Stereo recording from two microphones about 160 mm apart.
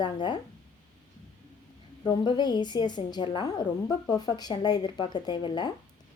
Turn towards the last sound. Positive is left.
turn(degrees=30)  # may be behind; listen again after turning